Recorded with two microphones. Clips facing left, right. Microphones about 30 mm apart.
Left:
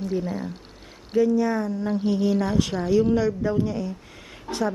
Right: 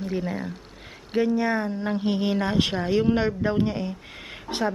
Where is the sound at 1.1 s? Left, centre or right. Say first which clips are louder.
Left 2 dB; right.